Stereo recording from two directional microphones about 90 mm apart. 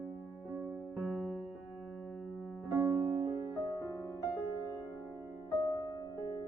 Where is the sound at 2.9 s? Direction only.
20° right (ahead or behind).